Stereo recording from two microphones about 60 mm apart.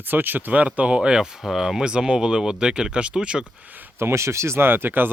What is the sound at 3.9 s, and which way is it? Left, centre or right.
Speech, right.